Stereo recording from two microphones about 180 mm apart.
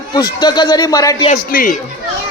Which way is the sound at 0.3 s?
25° left (ahead or behind).